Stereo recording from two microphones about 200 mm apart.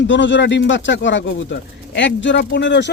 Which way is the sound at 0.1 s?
65° left (ahead or behind).